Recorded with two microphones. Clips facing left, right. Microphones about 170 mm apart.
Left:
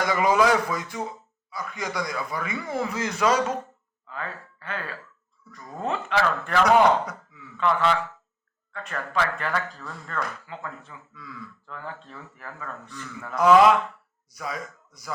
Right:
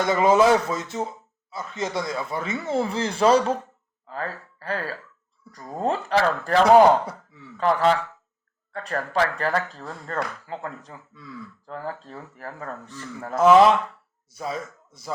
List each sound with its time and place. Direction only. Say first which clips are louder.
0.0 s speech: right 3 dB; 25° right (ahead or behind)